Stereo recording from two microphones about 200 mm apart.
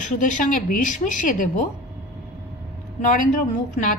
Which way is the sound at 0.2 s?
40° left (ahead or behind).